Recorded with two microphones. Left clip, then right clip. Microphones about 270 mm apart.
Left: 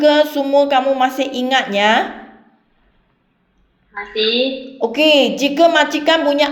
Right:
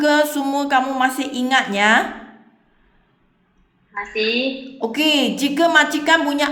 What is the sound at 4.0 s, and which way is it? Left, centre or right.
Speech, centre.